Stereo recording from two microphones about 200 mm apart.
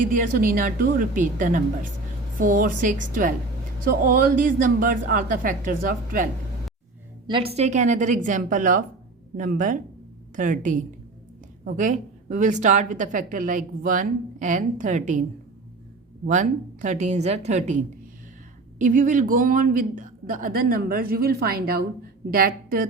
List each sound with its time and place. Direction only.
0.0 s speech: 40° right (ahead or behind)
7.3 s a woman's voice: 30° right (ahead or behind)
16.2 s a woman's voice: 40° right (ahead or behind)